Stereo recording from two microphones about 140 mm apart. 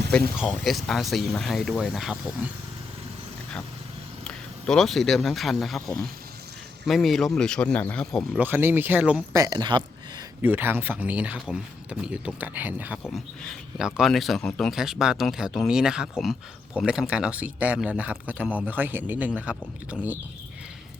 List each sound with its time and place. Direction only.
0.3 s speech: centre (ahead or behind)
4.2 s speech: 5° left (ahead or behind)
8.3 s a man's voice: 10° right (ahead or behind)
9.3 s speech: 25° right (ahead or behind)
10.4 s a man's voice: 15° right (ahead or behind)
13.1 s a man's voice: centre (ahead or behind)